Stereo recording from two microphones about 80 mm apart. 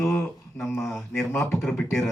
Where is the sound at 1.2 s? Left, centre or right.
Left.